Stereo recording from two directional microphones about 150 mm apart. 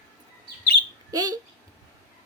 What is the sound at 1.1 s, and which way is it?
Speech, 25° right (ahead or behind).